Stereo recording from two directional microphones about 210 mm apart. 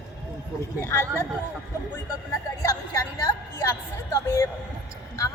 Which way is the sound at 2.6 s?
15° left (ahead or behind).